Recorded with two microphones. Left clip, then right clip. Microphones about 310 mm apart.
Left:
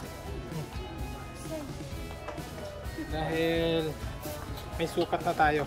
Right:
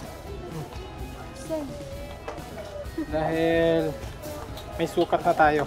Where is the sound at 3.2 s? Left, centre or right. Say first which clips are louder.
Right 6 dB; centre.